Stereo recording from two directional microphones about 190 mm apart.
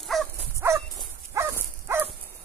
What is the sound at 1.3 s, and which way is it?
Dog, 15° right (ahead or behind).